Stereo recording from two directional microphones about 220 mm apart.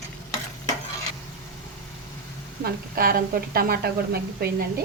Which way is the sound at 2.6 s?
40° right (ahead or behind).